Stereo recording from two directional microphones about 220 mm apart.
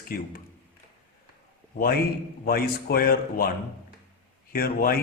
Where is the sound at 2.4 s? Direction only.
45° left (ahead or behind).